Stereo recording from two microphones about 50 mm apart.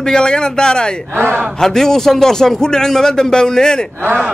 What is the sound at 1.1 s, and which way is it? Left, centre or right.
Speech, right.